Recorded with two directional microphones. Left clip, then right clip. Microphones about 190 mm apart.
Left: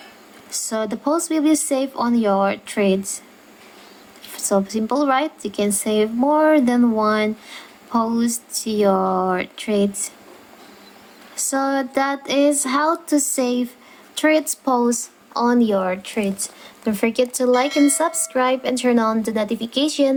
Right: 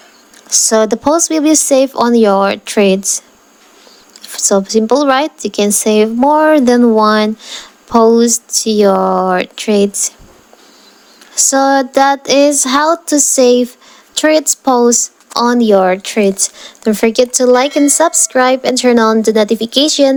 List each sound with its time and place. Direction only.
0.5 s speech: 40° right (ahead or behind)
4.3 s speech: 30° right (ahead or behind)
11.3 s speech: 35° right (ahead or behind)
17.7 s a woman's voice: centre (ahead or behind)
17.9 s speech: 35° right (ahead or behind)